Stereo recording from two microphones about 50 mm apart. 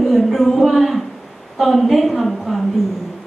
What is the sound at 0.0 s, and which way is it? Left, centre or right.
A woman's voice, centre.